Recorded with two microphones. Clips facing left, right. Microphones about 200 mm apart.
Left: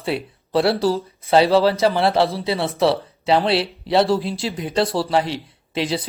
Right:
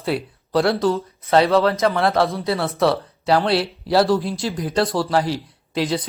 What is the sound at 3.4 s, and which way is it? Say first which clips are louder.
A man's voice: even; centre (ahead or behind).